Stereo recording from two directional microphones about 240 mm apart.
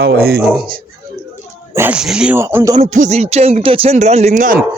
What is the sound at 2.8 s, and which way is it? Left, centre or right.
Speech, right.